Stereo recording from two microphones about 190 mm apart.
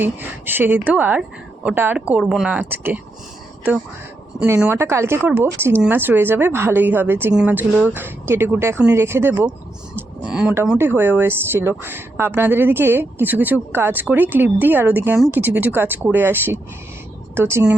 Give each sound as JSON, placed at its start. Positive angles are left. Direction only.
{"t": 0.0, "sound": "speech", "side_deg": -10}
{"t": 4.4, "sound": "speech", "side_deg": -10}